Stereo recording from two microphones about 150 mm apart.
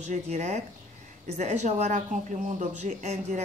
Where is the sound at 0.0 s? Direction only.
55° right (ahead or behind).